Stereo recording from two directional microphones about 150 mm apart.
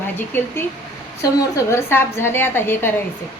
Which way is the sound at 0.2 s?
15° left (ahead or behind).